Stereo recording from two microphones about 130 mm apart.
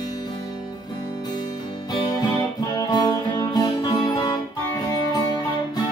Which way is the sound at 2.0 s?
35° left (ahead or behind).